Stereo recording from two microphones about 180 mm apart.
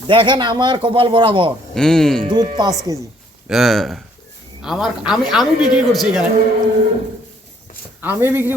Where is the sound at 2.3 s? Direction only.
25° right (ahead or behind).